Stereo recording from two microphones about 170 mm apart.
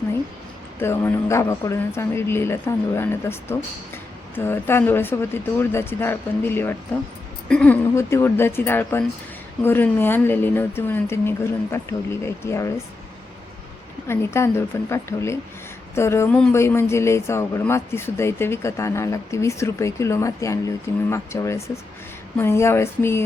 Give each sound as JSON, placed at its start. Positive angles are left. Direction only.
{"t": 0.8, "sound": "a woman's voice", "side_deg": 15}
{"t": 14.1, "sound": "speech", "side_deg": 15}